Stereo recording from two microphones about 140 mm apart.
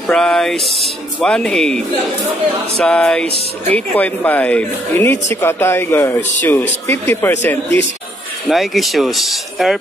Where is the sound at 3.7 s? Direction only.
10° left (ahead or behind).